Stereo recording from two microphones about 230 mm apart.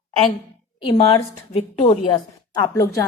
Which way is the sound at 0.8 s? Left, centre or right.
Left.